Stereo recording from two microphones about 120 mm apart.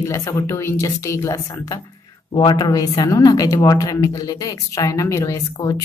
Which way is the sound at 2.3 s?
40° left (ahead or behind).